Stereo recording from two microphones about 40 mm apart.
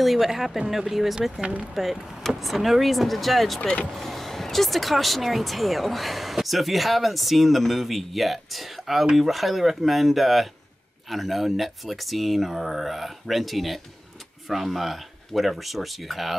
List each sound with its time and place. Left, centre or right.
0.0 s speech: centre
3.6 s speech: left
3.9 s speech: centre